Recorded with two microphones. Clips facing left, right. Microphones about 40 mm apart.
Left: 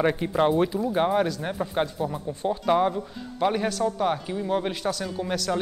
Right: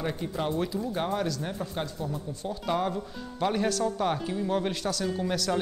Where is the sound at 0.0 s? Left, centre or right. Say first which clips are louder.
Left 9 dB; left.